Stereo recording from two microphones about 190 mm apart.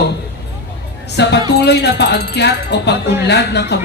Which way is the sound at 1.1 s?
60° left (ahead or behind).